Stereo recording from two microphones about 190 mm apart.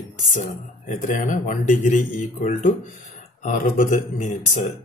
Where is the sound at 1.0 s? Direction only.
45° left (ahead or behind).